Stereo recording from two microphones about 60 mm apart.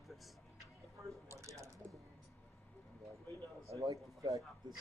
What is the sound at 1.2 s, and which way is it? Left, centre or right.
Typing, right.